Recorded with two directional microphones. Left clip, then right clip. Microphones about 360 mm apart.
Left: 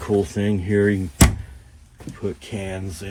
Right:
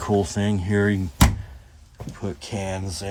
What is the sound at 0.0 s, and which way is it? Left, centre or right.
Speech, right.